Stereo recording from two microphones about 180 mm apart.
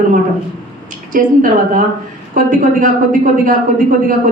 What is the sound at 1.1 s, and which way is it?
A woman's voice, 45° right (ahead or behind).